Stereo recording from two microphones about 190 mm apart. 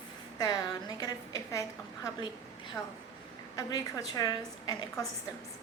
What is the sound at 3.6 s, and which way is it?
A woman's voice, 20° left (ahead or behind).